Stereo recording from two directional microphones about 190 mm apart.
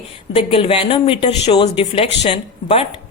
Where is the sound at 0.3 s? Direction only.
30° left (ahead or behind).